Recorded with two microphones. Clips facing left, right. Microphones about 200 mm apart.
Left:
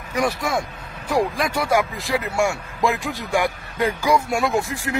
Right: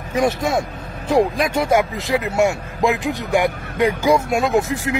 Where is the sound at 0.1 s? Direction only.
25° right (ahead or behind).